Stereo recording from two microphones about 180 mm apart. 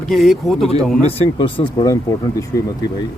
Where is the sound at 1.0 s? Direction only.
30° left (ahead or behind).